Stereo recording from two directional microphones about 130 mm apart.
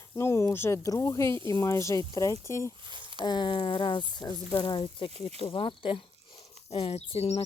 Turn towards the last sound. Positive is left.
turn(degrees=50)  # may be behind; listen again after turning